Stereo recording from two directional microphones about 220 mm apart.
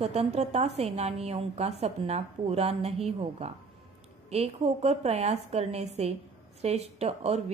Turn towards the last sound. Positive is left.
turn(degrees=-30)  # may be behind; listen again after turning